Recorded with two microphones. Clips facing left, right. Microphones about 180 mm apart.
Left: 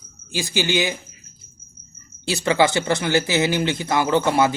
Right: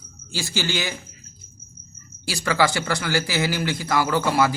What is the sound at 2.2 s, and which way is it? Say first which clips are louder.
Speech: left 3 dB; 25° left (ahead or behind).